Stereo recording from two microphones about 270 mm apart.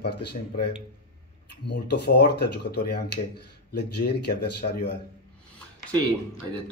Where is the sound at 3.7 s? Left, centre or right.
Left.